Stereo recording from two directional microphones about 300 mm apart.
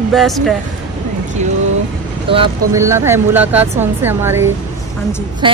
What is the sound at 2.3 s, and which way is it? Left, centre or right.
Speech, centre.